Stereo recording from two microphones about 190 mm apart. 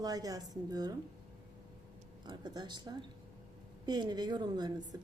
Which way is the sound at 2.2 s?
20° right (ahead or behind).